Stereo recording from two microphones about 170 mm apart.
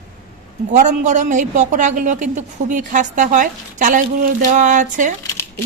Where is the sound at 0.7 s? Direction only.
45° right (ahead or behind).